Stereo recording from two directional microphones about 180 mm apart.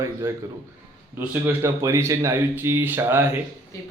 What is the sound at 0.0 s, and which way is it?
Speech, 15° right (ahead or behind).